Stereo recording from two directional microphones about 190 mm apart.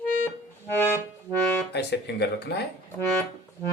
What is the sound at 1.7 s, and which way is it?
Speech, 60° left (ahead or behind).